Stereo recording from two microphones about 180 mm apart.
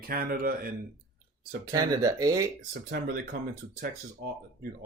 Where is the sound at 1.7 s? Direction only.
20° right (ahead or behind).